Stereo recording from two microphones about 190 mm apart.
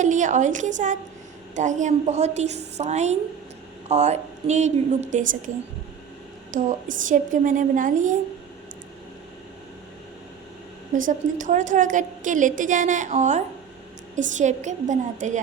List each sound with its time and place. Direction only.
0.0 s a woman's voice: 40° right (ahead or behind)
6.5 s a woman's voice: 45° right (ahead or behind)
10.9 s a woman's voice: 45° right (ahead or behind)